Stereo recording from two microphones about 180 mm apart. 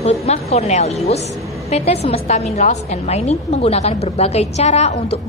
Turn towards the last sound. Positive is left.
turn(degrees=35)  # may be behind; listen again after turning